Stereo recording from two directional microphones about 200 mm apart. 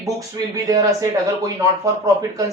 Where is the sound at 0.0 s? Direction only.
15° right (ahead or behind).